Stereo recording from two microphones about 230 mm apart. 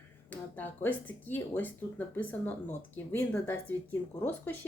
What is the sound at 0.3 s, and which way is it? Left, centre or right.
Speech, centre.